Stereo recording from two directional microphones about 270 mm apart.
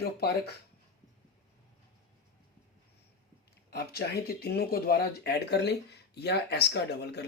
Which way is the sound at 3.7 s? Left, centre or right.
Left.